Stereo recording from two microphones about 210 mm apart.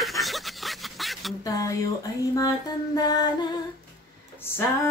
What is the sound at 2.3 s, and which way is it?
Music, 15° left (ahead or behind).